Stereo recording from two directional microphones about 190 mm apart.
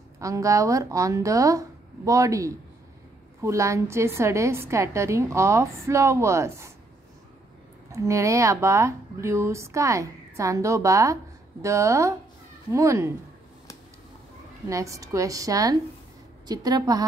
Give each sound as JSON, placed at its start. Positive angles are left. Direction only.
{"t": 0.2, "sound": "a woman's voice", "side_deg": -15}
{"t": 7.9, "sound": "a woman's voice", "side_deg": -15}
{"t": 14.7, "sound": "a woman's voice", "side_deg": -15}